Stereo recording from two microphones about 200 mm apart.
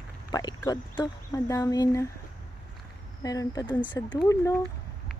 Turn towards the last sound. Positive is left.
turn(degrees=15)  # may be behind; listen again after turning